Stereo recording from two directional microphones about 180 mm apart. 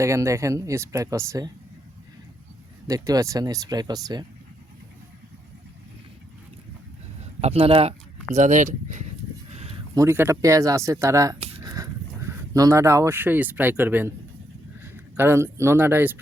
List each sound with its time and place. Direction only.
0.0 s speech: 15° right (ahead or behind)
2.8 s speech: 20° right (ahead or behind)
7.4 s speech: 30° right (ahead or behind)
9.5 s a sound: 35° right (ahead or behind)
9.9 s a man's voice: 15° right (ahead or behind)